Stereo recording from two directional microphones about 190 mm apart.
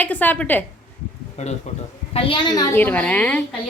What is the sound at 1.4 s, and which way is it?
A man's voice, 35° left (ahead or behind).